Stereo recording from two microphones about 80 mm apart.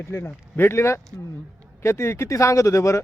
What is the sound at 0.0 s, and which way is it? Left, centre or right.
Speech, left.